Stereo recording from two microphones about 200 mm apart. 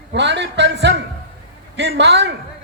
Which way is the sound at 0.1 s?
60° right (ahead or behind).